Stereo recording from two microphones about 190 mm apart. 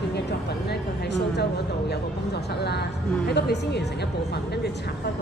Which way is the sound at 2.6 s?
60° left (ahead or behind).